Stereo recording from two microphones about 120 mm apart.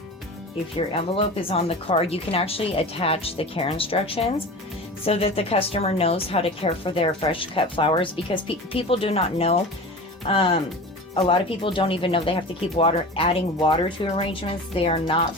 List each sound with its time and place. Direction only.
0.9 s a woman's voice: 55° left (ahead or behind)